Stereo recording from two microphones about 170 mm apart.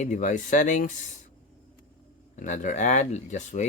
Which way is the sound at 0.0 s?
45° left (ahead or behind).